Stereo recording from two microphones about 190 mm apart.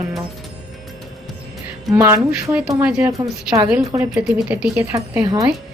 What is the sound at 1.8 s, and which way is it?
A woman's voice, 15° right (ahead or behind).